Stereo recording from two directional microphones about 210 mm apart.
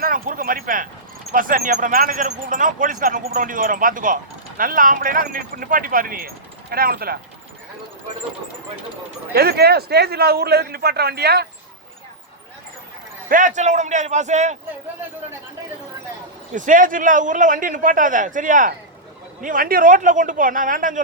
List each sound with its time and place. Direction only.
0.0 s a sound: 40° right (ahead or behind)
1.3 s speech: 40° right (ahead or behind)
9.3 s a man's voice: 50° right (ahead or behind)
13.2 s speech: 40° right (ahead or behind)
16.5 s speech: 40° right (ahead or behind)